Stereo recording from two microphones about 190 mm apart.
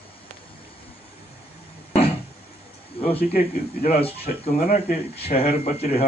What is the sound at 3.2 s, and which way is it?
Speech, 40° left (ahead or behind).